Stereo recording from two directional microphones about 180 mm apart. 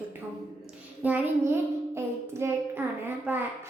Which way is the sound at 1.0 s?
10° right (ahead or behind).